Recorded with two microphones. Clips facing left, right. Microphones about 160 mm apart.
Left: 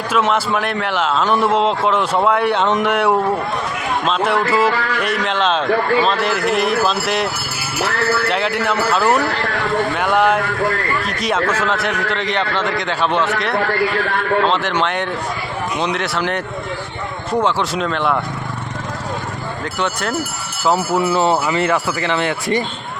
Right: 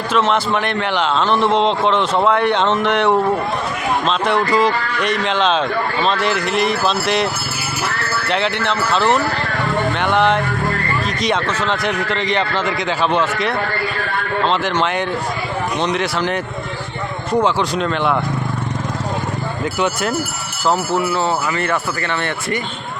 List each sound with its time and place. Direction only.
0.1 s a man's voice: 10° left (ahead or behind)
8.3 s a man's voice: 5° left (ahead or behind)
19.8 s speech: 5° right (ahead or behind)
21.0 s speech: 20° left (ahead or behind)